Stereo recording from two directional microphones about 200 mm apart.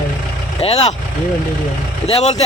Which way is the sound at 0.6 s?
30° left (ahead or behind).